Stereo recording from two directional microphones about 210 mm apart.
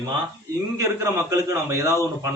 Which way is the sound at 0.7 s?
15° right (ahead or behind).